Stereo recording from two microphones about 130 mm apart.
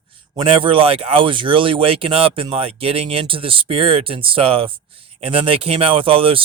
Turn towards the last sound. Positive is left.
turn(degrees=-45)  # may be behind; listen again after turning